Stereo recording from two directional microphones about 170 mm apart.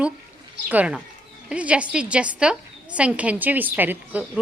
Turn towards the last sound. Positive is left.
turn(degrees=-10)  # may be behind; listen again after turning